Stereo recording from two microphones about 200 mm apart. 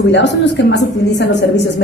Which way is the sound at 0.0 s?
60° left (ahead or behind).